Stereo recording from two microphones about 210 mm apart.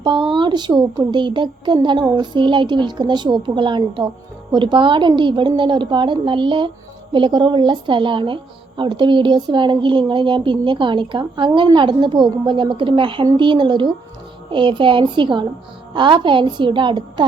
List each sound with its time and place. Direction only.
0.0 s a woman's voice: 25° right (ahead or behind)